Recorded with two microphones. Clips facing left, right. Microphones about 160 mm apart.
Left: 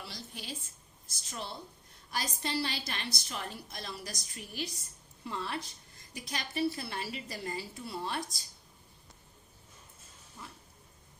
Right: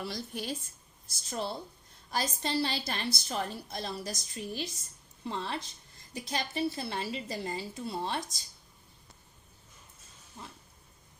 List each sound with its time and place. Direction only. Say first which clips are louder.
0.0 s a woman's voice: right 8 dB; 50° right (ahead or behind)
1.3 s a woman's voice: right 6 dB; 35° right (ahead or behind)